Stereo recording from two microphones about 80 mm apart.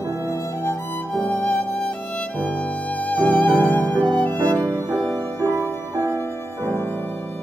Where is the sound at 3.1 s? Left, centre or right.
Centre.